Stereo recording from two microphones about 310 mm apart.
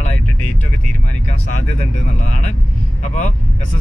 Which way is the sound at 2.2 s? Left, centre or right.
Left.